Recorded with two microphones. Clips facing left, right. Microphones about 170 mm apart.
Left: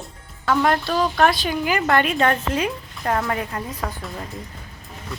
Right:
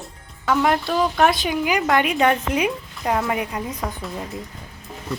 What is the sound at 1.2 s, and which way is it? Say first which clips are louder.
A woman's voice: even; 20° right (ahead or behind).